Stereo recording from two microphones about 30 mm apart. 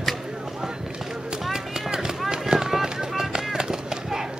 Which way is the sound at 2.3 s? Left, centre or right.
Right.